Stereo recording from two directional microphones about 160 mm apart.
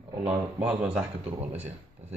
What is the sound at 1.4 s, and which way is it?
Speech, 40° right (ahead or behind).